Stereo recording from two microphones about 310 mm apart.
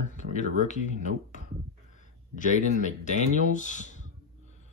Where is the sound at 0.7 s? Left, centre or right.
Left.